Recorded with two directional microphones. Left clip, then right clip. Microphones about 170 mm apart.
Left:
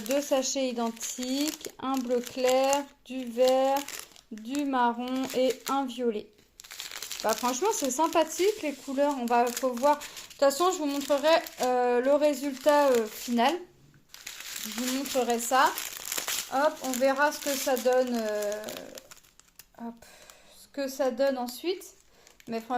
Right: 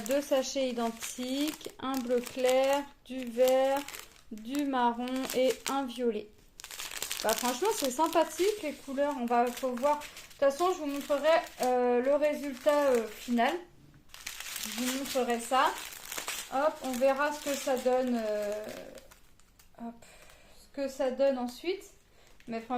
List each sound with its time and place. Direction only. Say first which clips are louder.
0.0 s speech: left 2 dB; 15° left (ahead or behind)
6.6 s crumpling: even; 35° right (ahead or behind)
7.4 s speech: left 2 dB; 20° left (ahead or behind)
9.0 s speech: left 3 dB; 60° left (ahead or behind)
10.4 s speech: left 3 dB; 60° left (ahead or behind)
15.1 s speech: left 3 dB; 50° left (ahead or behind)
19.8 s a sound: left 3 dB; 50° left (ahead or behind)
20.7 s speech: left 2 dB; 45° left (ahead or behind)